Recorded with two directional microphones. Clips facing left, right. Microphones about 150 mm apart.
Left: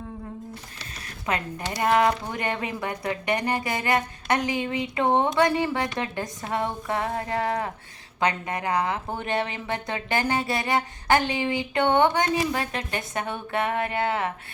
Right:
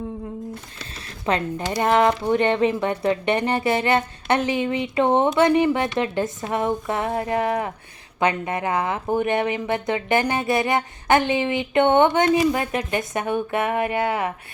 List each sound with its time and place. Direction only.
1.2 s speech: 30° right (ahead or behind); by 14.3 s 15° right (ahead or behind)